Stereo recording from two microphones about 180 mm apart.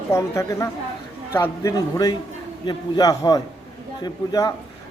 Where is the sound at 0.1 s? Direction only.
15° left (ahead or behind).